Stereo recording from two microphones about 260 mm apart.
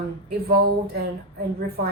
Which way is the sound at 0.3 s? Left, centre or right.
Right.